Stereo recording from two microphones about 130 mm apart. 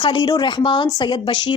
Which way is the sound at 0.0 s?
35° left (ahead or behind).